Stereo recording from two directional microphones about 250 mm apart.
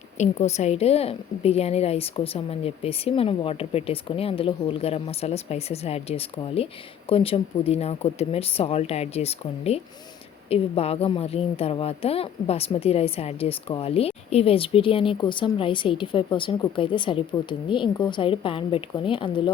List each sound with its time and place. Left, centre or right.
0.2 s speech: left